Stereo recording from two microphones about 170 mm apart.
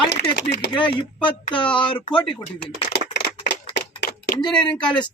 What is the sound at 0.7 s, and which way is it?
Speech, 25° left (ahead or behind).